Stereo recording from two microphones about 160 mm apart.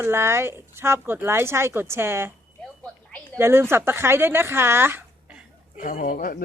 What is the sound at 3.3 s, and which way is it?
Speech, 15° right (ahead or behind).